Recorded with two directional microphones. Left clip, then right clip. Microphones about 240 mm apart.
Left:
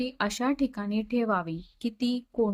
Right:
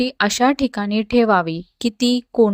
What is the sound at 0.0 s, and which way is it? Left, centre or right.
A woman's voice, right.